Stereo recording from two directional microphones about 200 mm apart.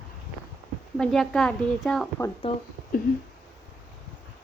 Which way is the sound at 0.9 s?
5° left (ahead or behind).